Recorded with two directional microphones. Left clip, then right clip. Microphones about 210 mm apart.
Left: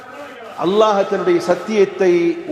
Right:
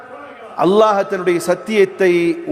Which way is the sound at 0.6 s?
60° right (ahead or behind).